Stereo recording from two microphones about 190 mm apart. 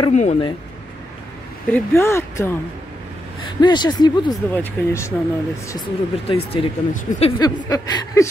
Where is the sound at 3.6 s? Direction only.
20° left (ahead or behind).